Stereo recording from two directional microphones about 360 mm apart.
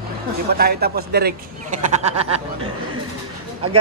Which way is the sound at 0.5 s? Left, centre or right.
Right.